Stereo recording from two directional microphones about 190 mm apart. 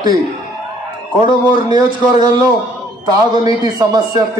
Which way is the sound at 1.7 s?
20° right (ahead or behind).